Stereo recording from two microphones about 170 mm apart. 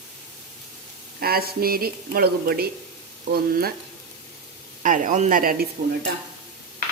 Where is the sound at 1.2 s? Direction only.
65° right (ahead or behind).